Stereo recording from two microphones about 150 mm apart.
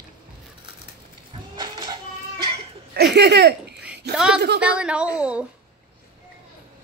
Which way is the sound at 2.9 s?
90° right.